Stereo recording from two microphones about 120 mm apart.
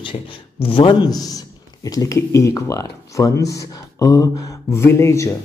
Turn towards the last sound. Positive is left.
turn(degrees=25)  # may be behind; listen again after turning